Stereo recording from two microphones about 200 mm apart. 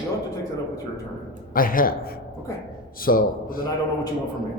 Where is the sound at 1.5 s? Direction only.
45° left (ahead or behind).